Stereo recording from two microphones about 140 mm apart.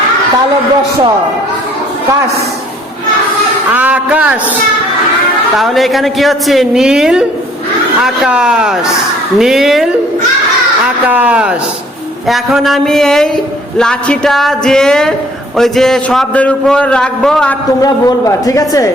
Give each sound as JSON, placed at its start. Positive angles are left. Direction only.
{"t": 3.7, "sound": "a man's voice", "side_deg": -10}
{"t": 5.5, "sound": "a man's voice", "side_deg": 0}
{"t": 17.8, "sound": "speech", "side_deg": 25}